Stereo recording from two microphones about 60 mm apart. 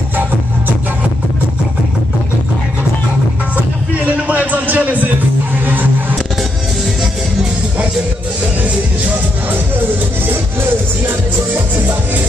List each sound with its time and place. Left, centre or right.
3.5 s music: right
5.7 s a sound: right
10.3 s music: right